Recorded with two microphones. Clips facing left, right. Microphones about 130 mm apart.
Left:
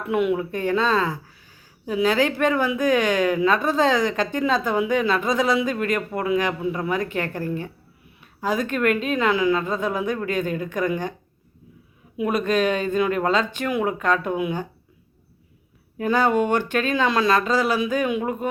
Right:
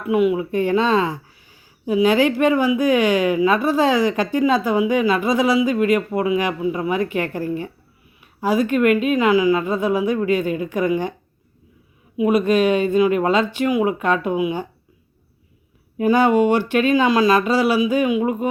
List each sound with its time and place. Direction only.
0.0 s speech: 5° right (ahead or behind)
0.5 s speech: 15° right (ahead or behind)
12.1 s speech: 5° right (ahead or behind)
16.0 s speech: 15° right (ahead or behind)